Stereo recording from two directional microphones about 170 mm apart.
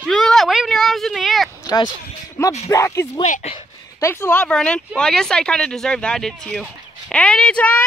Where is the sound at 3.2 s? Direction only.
40° left (ahead or behind).